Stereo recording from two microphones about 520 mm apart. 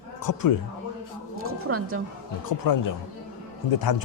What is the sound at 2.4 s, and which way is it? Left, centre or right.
Speech, left.